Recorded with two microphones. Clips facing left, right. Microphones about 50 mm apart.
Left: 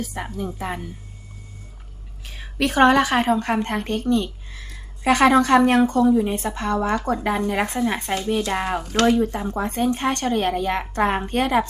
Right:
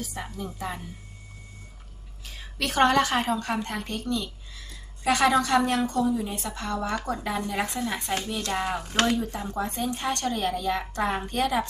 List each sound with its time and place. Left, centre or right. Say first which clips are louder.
0.0 s a woman's voice: left 6 dB; left
2.2 s a sound: left 7 dB; left
2.6 s a woman's voice: left 5 dB; left